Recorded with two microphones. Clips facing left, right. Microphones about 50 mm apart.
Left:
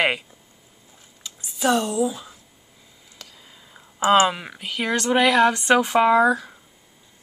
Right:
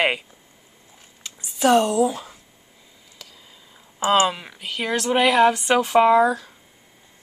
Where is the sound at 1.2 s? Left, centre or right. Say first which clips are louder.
Right 3 dB; right.